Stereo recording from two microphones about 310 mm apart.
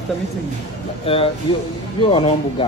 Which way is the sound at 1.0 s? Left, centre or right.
Centre.